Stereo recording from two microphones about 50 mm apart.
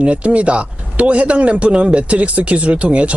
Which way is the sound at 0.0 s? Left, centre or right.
Right.